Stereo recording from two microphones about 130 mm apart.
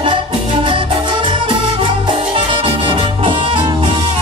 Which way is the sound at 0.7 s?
40° right (ahead or behind).